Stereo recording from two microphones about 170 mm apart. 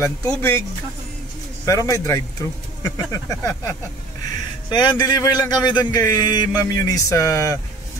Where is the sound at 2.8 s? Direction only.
20° left (ahead or behind).